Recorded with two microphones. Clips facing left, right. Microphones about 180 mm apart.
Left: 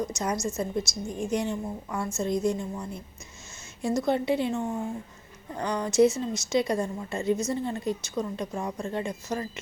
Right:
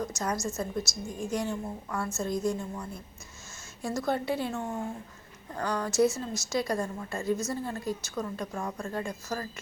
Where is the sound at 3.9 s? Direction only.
20° left (ahead or behind).